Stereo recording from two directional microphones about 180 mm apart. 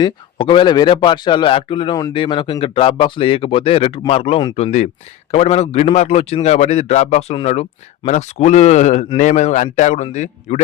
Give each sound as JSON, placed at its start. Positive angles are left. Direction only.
{"t": 0.0, "sound": "a man's voice", "side_deg": 25}